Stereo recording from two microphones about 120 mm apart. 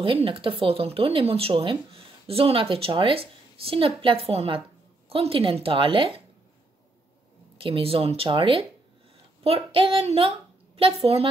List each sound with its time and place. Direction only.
0.0 s speech: 50° right (ahead or behind)
7.5 s speech: 50° right (ahead or behind)